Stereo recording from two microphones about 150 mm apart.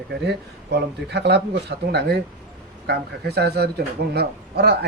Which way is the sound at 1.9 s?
90° right.